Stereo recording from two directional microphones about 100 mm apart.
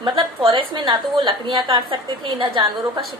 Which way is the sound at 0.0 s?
50° right (ahead or behind).